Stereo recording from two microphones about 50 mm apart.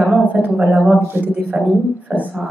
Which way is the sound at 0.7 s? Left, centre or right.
Centre.